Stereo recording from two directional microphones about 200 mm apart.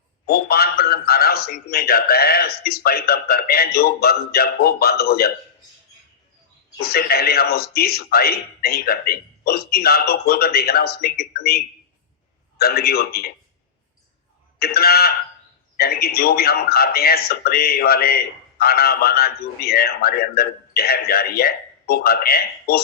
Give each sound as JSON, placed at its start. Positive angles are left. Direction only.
{"t": 0.3, "sound": "a man's voice", "side_deg": 50}
{"t": 6.7, "sound": "a man's voice", "side_deg": 50}
{"t": 14.6, "sound": "a man's voice", "side_deg": 50}